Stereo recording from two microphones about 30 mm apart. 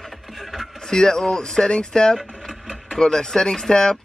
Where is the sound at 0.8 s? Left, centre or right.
Left.